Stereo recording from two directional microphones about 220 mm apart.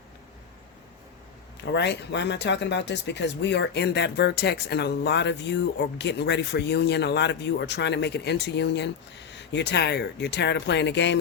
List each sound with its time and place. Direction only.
1.7 s speech: 50° left (ahead or behind)